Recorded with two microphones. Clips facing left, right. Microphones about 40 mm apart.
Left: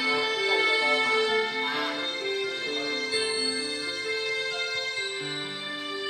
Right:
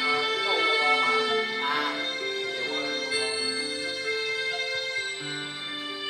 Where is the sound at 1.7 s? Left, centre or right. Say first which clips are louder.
Right 2 dB; right.